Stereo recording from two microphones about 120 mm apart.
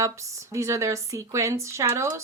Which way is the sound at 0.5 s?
25° right (ahead or behind).